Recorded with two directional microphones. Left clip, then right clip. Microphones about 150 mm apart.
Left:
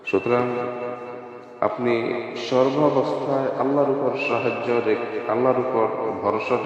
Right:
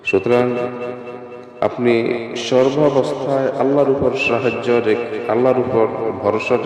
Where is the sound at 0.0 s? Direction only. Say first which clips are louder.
Right 6 dB; 25° right (ahead or behind).